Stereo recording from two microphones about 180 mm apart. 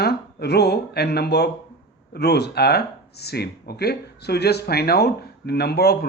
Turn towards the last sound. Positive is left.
turn(degrees=60)  # may be behind; listen again after turning